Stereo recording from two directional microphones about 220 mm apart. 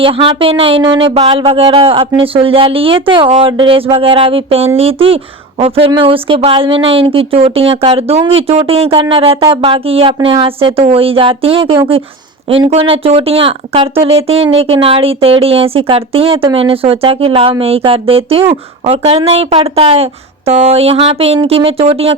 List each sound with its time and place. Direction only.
0.0 s speech: 25° right (ahead or behind)